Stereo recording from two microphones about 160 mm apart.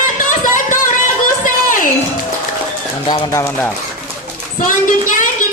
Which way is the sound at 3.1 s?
20° left (ahead or behind).